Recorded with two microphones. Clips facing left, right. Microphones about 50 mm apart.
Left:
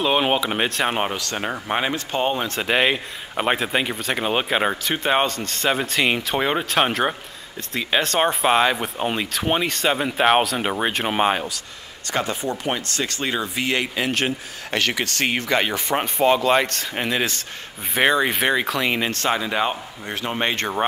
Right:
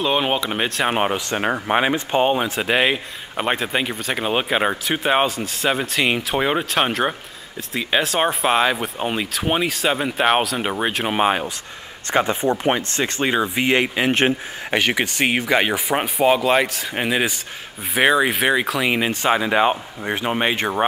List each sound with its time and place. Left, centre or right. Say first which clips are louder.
0.0 s speech: even; centre
0.9 s speech: right 4 dB; centre
12.1 s speech: right 5 dB; right